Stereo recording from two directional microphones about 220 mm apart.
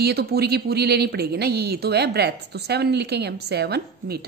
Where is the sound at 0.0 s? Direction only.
45° right (ahead or behind).